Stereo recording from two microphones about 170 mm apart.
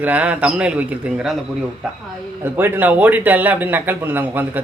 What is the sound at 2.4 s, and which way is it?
Speech, 15° right (ahead or behind).